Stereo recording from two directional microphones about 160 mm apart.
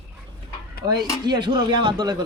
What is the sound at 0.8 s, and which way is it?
Speech, 25° right (ahead or behind).